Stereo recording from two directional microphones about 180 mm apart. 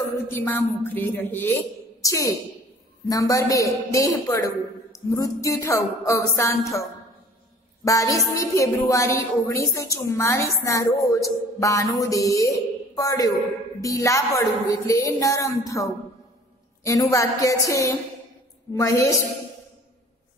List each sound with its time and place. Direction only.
0.3 s speech: 10° left (ahead or behind)
3.1 s a woman's voice: 20° left (ahead or behind)